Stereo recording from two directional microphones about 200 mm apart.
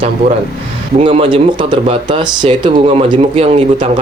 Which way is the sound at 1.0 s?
25° right (ahead or behind).